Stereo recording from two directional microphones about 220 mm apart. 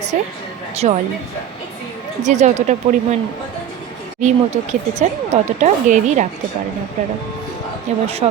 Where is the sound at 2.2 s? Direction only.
30° right (ahead or behind).